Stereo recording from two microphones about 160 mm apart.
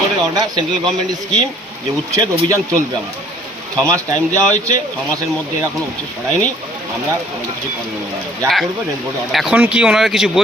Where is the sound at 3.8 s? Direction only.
20° right (ahead or behind).